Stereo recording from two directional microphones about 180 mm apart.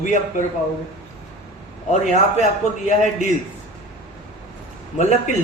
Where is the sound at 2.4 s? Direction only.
40° left (ahead or behind).